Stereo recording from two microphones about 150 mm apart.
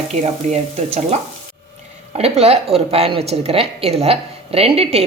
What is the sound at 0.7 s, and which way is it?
Speech, 45° right (ahead or behind).